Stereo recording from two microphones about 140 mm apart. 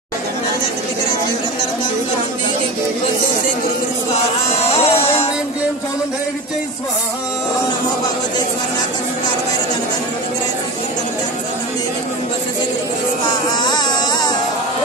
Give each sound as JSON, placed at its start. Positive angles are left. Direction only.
{"t": 4.6, "sound": "music", "side_deg": 45}
{"t": 13.6, "sound": "music", "side_deg": 30}